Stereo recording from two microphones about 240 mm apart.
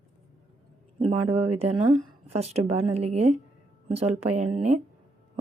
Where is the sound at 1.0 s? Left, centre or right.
Right.